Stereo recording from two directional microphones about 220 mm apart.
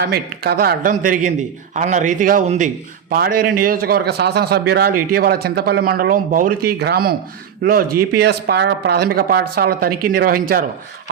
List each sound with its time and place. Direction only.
0.0 s a man's voice: 45° right (ahead or behind)